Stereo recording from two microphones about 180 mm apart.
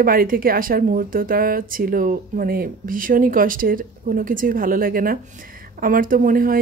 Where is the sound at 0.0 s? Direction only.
55° right (ahead or behind).